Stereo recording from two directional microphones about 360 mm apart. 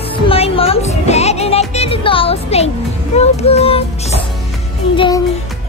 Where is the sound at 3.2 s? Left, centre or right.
Centre.